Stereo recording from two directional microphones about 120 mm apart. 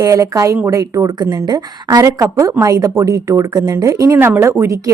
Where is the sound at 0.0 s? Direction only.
30° right (ahead or behind).